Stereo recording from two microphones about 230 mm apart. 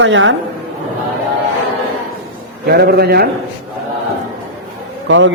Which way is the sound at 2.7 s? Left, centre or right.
Right.